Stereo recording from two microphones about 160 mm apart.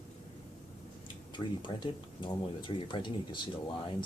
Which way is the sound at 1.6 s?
30° left (ahead or behind).